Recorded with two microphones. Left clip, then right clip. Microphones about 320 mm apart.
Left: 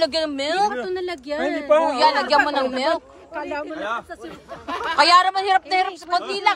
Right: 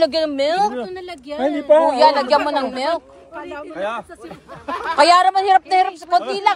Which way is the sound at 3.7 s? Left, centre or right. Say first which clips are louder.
Right 6 dB; right.